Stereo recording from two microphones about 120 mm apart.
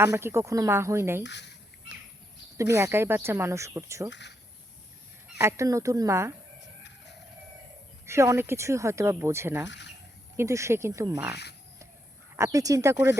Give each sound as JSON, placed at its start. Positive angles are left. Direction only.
{"t": 0.0, "sound": "speech", "side_deg": -20}
{"t": 2.6, "sound": "speech", "side_deg": -25}
{"t": 5.4, "sound": "speech", "side_deg": -25}
{"t": 8.0, "sound": "speech", "side_deg": -25}
{"t": 12.4, "sound": "speech", "side_deg": -30}